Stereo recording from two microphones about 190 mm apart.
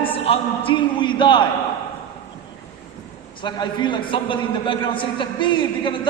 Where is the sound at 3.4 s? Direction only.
25° left (ahead or behind).